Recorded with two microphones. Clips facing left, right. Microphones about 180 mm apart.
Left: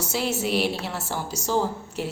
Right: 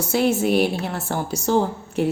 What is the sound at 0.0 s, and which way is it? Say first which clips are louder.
A woman's voice: right 7 dB; 55° right (ahead or behind).